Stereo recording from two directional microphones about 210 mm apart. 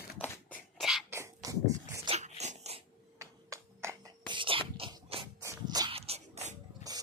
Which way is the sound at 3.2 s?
15° right (ahead or behind).